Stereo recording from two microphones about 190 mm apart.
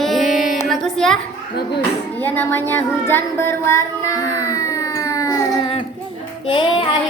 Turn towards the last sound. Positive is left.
turn(degrees=25)  # may be behind; listen again after turning